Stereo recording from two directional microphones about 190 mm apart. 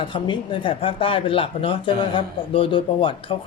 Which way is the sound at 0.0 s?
25° left (ahead or behind).